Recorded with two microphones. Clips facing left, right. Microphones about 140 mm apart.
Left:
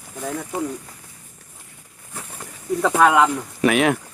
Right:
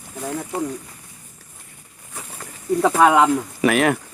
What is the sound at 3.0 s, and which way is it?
Speech, 15° right (ahead or behind).